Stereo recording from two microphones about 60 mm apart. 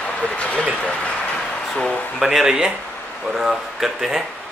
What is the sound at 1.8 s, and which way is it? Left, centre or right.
Speech, centre.